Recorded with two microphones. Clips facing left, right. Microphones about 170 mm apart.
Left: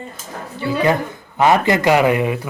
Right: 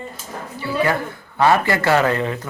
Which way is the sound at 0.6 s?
20° left (ahead or behind).